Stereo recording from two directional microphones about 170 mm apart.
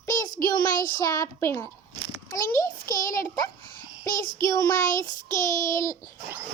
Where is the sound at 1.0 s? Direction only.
20° left (ahead or behind).